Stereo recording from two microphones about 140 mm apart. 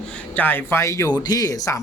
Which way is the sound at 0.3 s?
15° left (ahead or behind).